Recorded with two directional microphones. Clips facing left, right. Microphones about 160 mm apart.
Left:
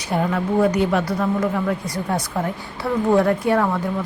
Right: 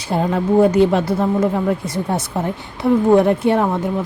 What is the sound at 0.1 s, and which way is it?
A woman's voice, 25° right (ahead or behind).